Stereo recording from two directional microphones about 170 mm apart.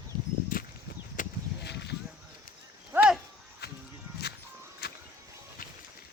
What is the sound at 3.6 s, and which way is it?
Music, 65° left (ahead or behind).